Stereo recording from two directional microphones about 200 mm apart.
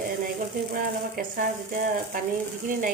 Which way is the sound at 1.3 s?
45° right (ahead or behind).